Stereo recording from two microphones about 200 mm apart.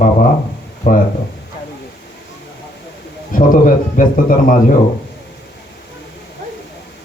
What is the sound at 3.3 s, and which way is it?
Speech, 40° left (ahead or behind).